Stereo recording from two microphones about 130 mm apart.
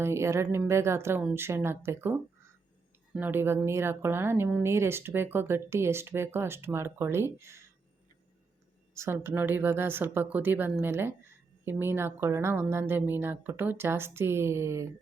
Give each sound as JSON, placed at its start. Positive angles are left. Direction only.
{"t": 0.0, "sound": "a woman's voice", "side_deg": -20}
{"t": 9.0, "sound": "a woman's voice", "side_deg": -20}